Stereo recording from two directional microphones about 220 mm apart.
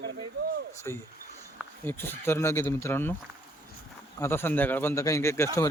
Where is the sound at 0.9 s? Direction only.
10° left (ahead or behind).